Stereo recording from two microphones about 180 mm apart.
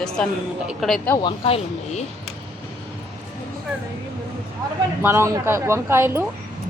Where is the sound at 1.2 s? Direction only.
35° left (ahead or behind).